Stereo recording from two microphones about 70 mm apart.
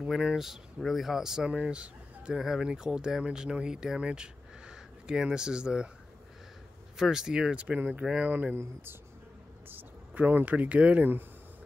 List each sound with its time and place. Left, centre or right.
0.1 s speech: centre
7.0 s speech: centre
8.0 s speech: centre
8.3 s speech: right
9.7 s speech: right